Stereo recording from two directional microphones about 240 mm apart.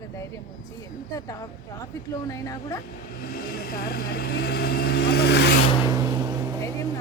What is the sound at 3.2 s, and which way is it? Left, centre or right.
Speech, left.